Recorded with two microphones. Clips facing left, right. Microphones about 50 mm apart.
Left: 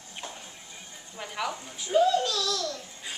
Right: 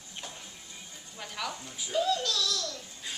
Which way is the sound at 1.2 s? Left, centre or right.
Centre.